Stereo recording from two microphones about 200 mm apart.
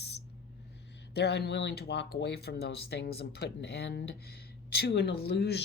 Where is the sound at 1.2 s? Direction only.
55° left (ahead or behind).